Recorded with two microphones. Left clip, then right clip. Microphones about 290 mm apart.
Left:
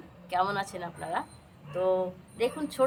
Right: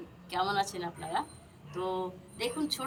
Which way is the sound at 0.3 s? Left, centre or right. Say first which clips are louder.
Left 2 dB; centre.